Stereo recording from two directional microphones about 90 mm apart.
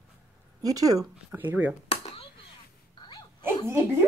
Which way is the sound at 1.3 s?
20° right (ahead or behind).